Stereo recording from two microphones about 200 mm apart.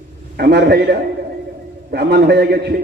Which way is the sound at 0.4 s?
55° right (ahead or behind).